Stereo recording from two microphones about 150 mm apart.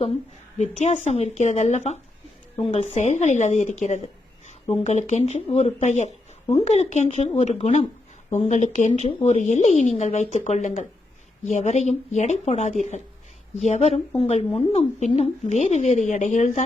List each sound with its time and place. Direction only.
0.6 s a woman's voice: 50° left (ahead or behind)